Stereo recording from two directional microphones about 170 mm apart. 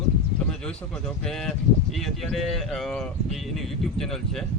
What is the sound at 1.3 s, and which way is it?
Speech, 5° left (ahead or behind).